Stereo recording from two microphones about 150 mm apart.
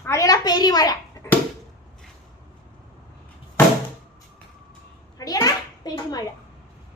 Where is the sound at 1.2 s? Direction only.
20° left (ahead or behind).